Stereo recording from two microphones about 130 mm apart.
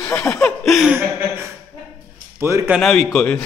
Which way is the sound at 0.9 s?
20° right (ahead or behind).